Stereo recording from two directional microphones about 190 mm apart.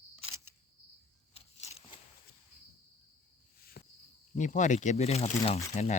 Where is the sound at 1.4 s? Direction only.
35° left (ahead or behind).